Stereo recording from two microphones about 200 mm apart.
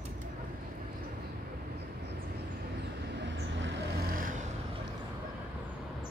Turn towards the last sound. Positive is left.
turn(degrees=-45)  # may be behind; listen again after turning